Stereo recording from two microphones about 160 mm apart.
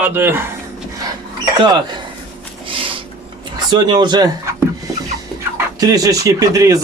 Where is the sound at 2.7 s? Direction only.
35° right (ahead or behind).